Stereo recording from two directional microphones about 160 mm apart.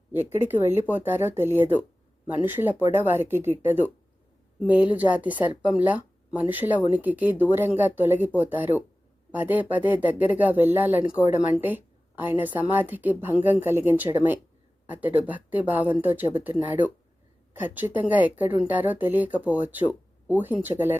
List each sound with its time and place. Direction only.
0.1 s a woman's voice: 15° right (ahead or behind)